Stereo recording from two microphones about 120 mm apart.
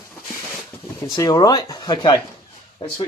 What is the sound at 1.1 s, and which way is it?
Speech, 40° left (ahead or behind).